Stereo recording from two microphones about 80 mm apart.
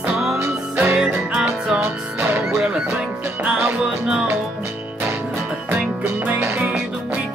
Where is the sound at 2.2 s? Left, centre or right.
Right.